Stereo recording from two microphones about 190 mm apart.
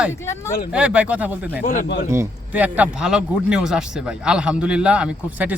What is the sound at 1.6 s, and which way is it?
Speech, 45° left (ahead or behind).